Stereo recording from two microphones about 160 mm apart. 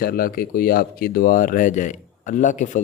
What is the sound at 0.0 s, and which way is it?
Speech, 65° left (ahead or behind).